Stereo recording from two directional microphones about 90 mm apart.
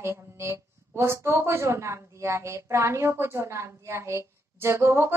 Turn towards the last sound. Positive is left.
turn(degrees=-30)  # may be behind; listen again after turning